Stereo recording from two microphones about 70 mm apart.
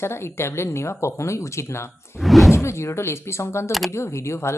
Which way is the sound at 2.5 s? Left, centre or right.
Left.